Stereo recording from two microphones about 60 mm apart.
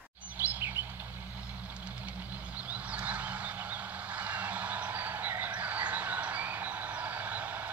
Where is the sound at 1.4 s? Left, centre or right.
Right.